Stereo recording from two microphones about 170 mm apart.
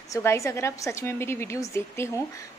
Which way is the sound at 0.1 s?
15° left (ahead or behind).